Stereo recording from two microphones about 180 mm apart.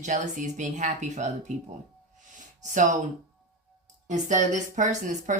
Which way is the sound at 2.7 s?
45° right (ahead or behind).